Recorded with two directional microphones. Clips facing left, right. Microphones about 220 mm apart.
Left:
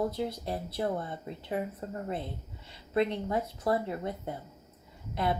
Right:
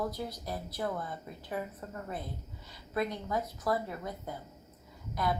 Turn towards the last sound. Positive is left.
turn(degrees=25)  # may be behind; listen again after turning